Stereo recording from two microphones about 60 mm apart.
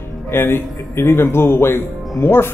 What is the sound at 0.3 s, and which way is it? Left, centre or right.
Speech, left.